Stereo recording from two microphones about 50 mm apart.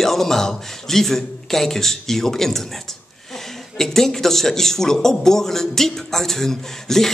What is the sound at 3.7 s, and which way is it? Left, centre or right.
A man's voice, centre.